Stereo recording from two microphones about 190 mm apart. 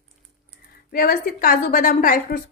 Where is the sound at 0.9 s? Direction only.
50° left (ahead or behind).